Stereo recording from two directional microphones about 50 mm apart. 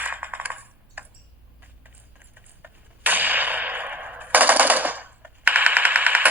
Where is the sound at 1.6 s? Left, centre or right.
Right.